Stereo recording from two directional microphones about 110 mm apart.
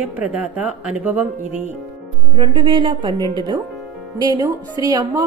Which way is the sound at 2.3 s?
50° right (ahead or behind).